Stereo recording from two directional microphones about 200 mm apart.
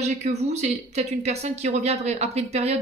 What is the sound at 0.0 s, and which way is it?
Speech, 35° right (ahead or behind).